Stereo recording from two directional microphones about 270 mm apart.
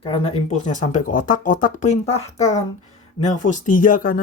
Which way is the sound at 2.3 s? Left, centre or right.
Centre.